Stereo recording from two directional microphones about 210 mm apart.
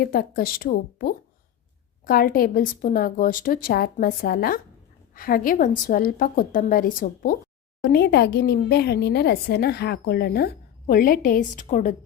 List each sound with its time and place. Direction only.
0.0 s a woman's voice: 45° left (ahead or behind)